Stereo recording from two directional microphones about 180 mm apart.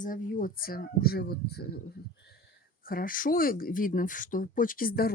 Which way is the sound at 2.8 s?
50° left (ahead or behind).